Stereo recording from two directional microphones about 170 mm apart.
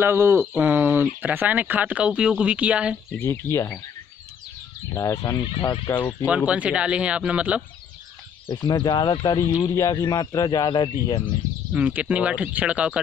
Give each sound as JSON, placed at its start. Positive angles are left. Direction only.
{"t": 0.0, "sound": "speech", "side_deg": -15}
{"t": 3.2, "sound": "speech", "side_deg": 15}
{"t": 4.9, "sound": "speech", "side_deg": 20}
{"t": 5.5, "sound": "speech", "side_deg": 30}
{"t": 6.2, "sound": "speech", "side_deg": -5}
{"t": 8.5, "sound": "speech", "side_deg": 25}
{"t": 11.7, "sound": "speech", "side_deg": -5}